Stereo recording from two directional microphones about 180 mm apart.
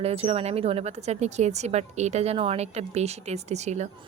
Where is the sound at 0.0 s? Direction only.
35° right (ahead or behind).